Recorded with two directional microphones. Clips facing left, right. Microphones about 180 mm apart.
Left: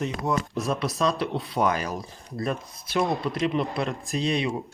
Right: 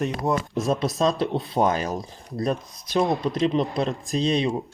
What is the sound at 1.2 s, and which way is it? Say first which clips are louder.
Speech: right 3 dB; 20° right (ahead or behind).